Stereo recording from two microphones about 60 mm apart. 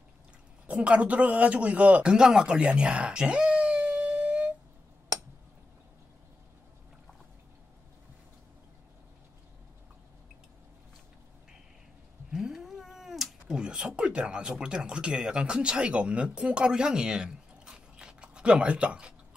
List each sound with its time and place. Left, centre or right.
0.7 s speech: right
12.3 s cat: centre
13.6 s speech: centre